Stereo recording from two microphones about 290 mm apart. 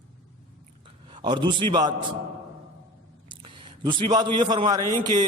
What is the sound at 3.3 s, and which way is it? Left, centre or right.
A man's voice, centre.